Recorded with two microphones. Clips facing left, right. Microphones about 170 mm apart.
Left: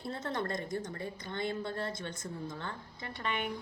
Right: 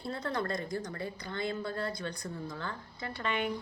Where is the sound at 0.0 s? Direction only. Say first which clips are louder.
Right 1 dB; 25° left (ahead or behind).